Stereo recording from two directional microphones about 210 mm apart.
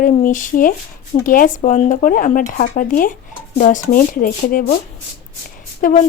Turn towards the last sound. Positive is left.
turn(degrees=35)  # may be behind; listen again after turning